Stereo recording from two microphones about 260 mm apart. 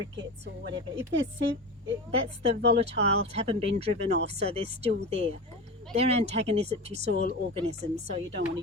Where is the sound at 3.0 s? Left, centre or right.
Right.